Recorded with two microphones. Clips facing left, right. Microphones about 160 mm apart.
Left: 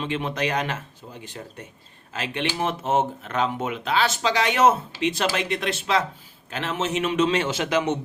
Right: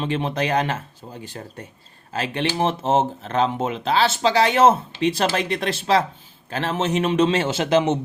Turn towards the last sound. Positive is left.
turn(degrees=-30)  # may be behind; listen again after turning